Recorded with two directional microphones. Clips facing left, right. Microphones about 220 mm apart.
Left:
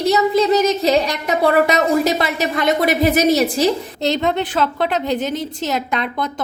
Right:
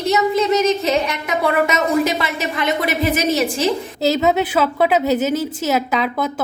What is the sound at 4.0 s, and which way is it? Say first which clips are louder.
A woman's voice: right 4 dB; 5° right (ahead or behind).